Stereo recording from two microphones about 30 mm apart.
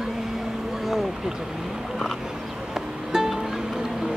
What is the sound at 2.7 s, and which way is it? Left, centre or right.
Music, centre.